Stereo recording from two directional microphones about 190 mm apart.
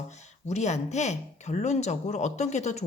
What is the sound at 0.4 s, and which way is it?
Speech, 35° left (ahead or behind).